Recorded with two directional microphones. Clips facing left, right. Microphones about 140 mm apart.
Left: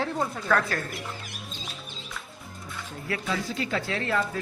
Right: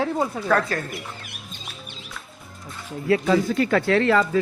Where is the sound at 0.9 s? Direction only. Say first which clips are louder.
Right 1 dB; 60° right (ahead or behind).